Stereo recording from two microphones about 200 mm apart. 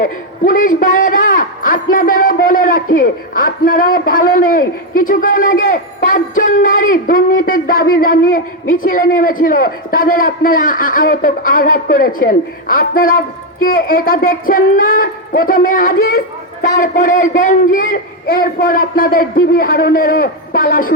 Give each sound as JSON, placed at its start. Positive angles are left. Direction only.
{"t": 0.0, "sound": "a man's voice", "side_deg": 45}